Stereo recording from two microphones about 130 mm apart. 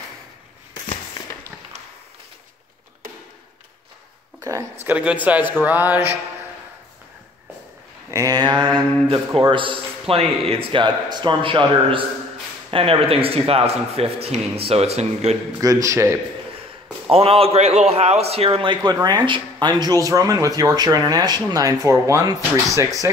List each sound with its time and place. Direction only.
4.4 s a sound: 25° right (ahead or behind)
4.8 s a man's voice: 10° right (ahead or behind)
8.1 s a man's voice: 25° right (ahead or behind); by 15.3 s 55° right (ahead or behind)
15.6 s speech: 25° right (ahead or behind)
17.1 s a man's voice: 50° right (ahead or behind); by 23.1 s 25° right (ahead or behind)